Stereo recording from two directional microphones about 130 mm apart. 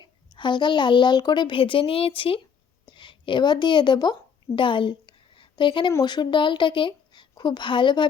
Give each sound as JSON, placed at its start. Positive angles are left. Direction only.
{"t": 0.0, "sound": "a child's voice", "side_deg": 35}
{"t": 4.5, "sound": "a sound", "side_deg": 40}
{"t": 5.9, "sound": "a woman's voice", "side_deg": 30}